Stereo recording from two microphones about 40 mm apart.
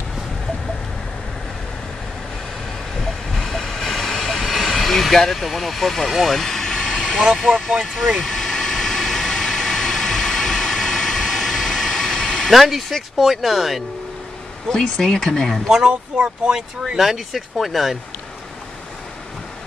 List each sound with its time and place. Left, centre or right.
3.0 s train: centre
4.5 s speech: centre
6.3 s vehicle: centre
7.2 s speech: centre
8.2 s vehicle: centre
12.4 s speech: centre
14.7 s speech: centre
15.9 s speech: right
17.0 s speech: centre